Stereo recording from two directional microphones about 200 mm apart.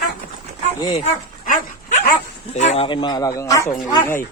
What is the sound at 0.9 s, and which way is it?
Dog, 35° left (ahead or behind).